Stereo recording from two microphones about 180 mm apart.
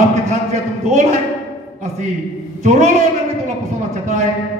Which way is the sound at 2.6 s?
40° right (ahead or behind).